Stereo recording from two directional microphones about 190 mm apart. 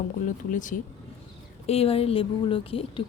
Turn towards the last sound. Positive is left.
turn(degrees=30)  # may be behind; listen again after turning